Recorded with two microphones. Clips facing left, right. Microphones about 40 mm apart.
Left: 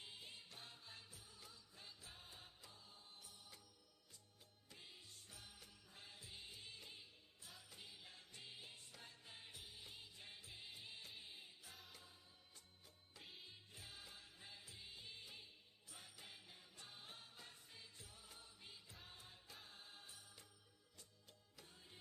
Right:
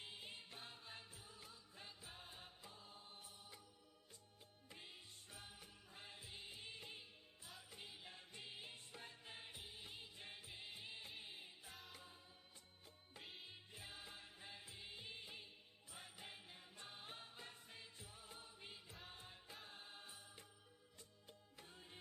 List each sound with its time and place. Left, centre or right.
0.0 s music: right
4.7 s music: right
11.7 s music: centre
13.2 s music: centre
13.5 s music: right